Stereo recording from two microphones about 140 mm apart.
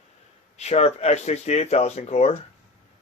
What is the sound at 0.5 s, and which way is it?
A man's voice, 50° left (ahead or behind).